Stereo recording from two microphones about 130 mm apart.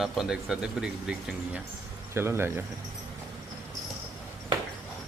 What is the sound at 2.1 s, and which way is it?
Speech, 20° right (ahead or behind).